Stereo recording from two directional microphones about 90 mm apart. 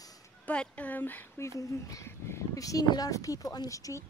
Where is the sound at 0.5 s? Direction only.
15° left (ahead or behind).